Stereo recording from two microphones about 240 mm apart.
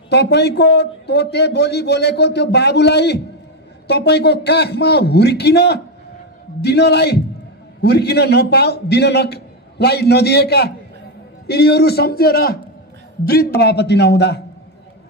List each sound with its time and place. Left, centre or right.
0.1 s a man's voice: left
13.6 s a man's voice: left